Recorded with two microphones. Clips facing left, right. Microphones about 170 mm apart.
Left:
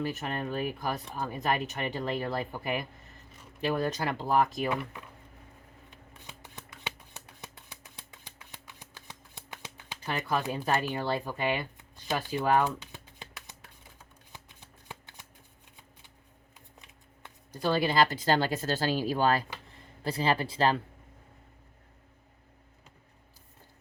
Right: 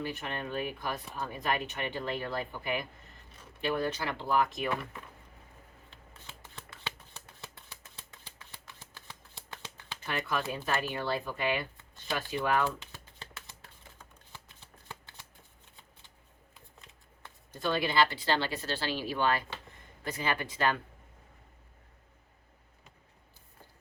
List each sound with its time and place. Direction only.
0.0 s speech: 40° left (ahead or behind)
5.9 s shuffling cards: 15° left (ahead or behind)
7.4 s a sound: 20° left (ahead or behind)
10.1 s speech: 35° left (ahead or behind)
12.6 s a sound: 15° left (ahead or behind)
14.3 s shuffling cards: 15° left (ahead or behind)
17.5 s speech: 35° left (ahead or behind)